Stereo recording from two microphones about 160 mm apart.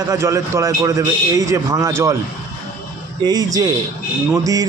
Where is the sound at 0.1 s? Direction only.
20° right (ahead or behind).